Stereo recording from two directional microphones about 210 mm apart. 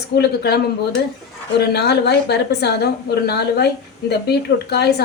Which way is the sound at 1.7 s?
50° left (ahead or behind).